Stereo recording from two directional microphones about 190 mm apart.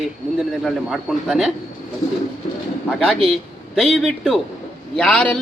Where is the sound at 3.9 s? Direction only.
Centre (ahead or behind).